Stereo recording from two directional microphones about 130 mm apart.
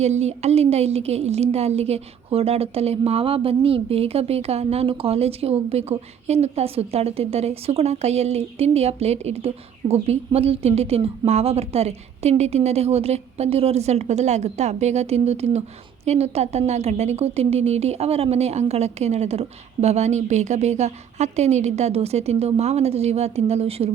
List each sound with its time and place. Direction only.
0.0 s a woman's voice: 55° right (ahead or behind)